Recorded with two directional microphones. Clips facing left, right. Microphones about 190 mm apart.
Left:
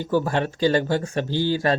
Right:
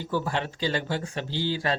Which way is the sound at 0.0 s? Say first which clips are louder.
Left 6 dB; 45° left (ahead or behind).